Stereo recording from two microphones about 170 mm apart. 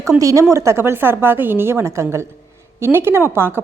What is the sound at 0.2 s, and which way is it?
A woman's voice, 20° right (ahead or behind).